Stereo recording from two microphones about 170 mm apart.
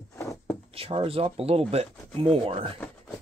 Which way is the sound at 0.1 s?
15° left (ahead or behind).